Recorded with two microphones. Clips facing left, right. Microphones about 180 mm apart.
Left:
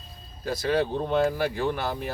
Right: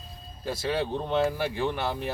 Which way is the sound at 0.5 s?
25° right (ahead or behind).